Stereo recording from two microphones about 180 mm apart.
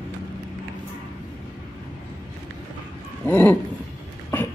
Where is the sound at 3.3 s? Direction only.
10° left (ahead or behind).